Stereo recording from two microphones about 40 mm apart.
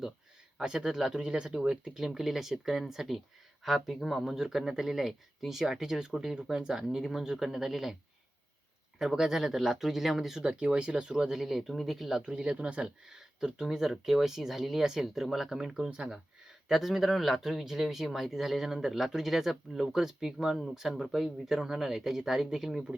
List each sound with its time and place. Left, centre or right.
0.6 s speech: centre
6.8 s speech: centre
9.0 s speech: centre
10.4 s speech: right; by 12.2 s centre
12.2 s speech: right
13.1 s speech: centre
15.7 s speech: right
16.6 s speech: centre